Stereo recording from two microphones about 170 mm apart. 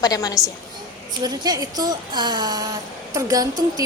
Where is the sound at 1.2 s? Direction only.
25° right (ahead or behind).